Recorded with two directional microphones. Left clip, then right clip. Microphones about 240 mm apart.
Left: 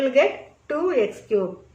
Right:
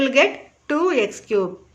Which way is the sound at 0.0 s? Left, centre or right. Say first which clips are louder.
Right 2 dB; right.